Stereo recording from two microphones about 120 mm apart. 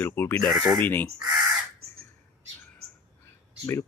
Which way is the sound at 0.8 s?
15° left (ahead or behind).